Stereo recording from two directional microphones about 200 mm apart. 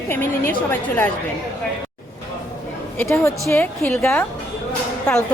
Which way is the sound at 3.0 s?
15° left (ahead or behind).